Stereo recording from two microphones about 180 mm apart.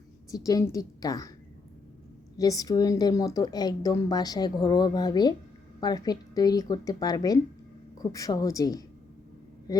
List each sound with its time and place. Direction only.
0.3 s a woman's voice: 20° left (ahead or behind)
2.4 s a woman's voice: 20° left (ahead or behind)